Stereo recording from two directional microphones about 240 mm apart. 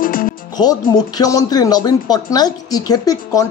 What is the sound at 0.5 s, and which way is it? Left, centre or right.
Speech, centre.